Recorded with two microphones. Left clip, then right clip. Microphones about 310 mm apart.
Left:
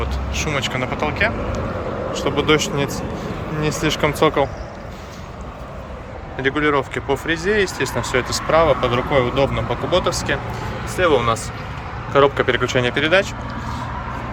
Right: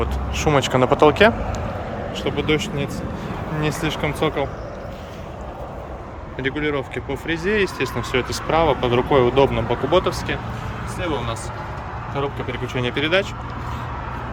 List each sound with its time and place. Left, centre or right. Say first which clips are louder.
0.0 s speech: right 2 dB; centre
2.1 s speech: left 4 dB; centre
6.3 s speech: left 5 dB; centre
10.9 s speech: left 10 dB; centre